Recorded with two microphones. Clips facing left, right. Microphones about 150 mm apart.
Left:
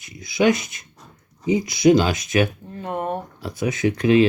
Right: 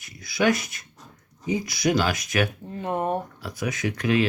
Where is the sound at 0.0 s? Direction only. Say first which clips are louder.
Left 4 dB; 20° left (ahead or behind).